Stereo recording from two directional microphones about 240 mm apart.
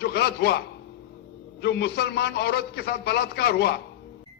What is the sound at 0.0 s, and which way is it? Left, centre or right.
Speech, left.